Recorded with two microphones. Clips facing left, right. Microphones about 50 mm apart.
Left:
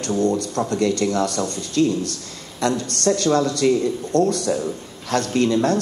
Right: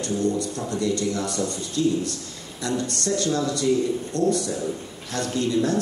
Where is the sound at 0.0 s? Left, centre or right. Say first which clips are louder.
Left 4 dB; left.